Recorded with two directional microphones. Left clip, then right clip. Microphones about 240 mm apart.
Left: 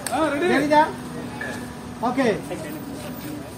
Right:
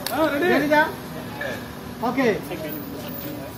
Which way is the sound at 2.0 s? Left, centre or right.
Left.